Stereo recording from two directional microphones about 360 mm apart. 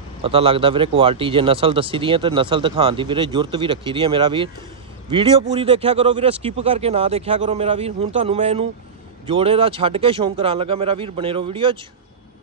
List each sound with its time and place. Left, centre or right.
0.2 s a man's voice: centre